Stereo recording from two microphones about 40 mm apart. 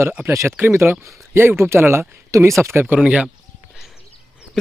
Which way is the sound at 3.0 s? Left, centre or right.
Right.